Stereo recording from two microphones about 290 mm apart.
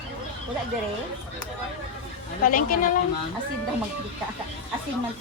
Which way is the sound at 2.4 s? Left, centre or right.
Left.